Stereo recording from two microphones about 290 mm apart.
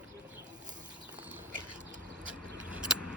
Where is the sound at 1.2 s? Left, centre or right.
Centre.